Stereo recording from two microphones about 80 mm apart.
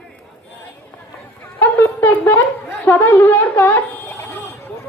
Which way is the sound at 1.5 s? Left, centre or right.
Left.